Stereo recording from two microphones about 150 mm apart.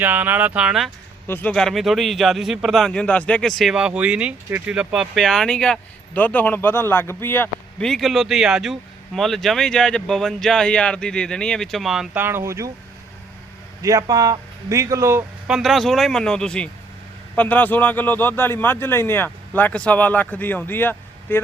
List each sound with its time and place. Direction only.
0.0 s speech: 10° right (ahead or behind)
1.3 s a man's voice: 10° left (ahead or behind)
7.9 s a man's voice: centre (ahead or behind)
12.2 s speech: 15° right (ahead or behind)
13.8 s speech: 25° right (ahead or behind)
15.4 s a man's voice: centre (ahead or behind); by 21.4 s 15° left (ahead or behind)